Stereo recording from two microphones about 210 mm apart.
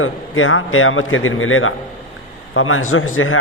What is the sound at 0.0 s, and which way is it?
A man's voice, 75° left (ahead or behind).